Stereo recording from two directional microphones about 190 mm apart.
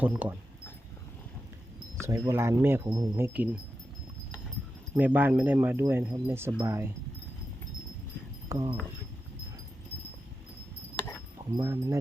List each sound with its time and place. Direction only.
0.0 s speech: 10° right (ahead or behind)
2.0 s speech: 15° right (ahead or behind)
4.9 s speech: 10° right (ahead or behind)
8.4 s speech: 25° right (ahead or behind)
11.5 s speech: 15° right (ahead or behind)